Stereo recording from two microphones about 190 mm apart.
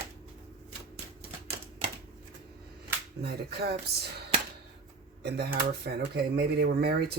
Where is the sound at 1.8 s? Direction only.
35° right (ahead or behind).